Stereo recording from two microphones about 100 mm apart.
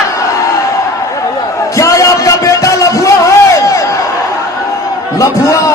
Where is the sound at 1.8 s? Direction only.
30° left (ahead or behind).